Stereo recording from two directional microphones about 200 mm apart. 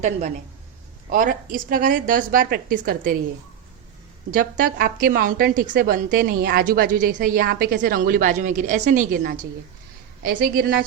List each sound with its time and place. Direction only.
1.1 s a woman's voice: 45° right (ahead or behind)
4.3 s a woman's voice: 45° right (ahead or behind)